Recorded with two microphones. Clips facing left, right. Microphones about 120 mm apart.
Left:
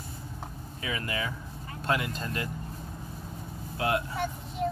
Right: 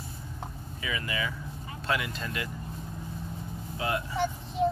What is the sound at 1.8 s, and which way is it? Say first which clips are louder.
Vehicle: left 2 dB; 45° left (ahead or behind).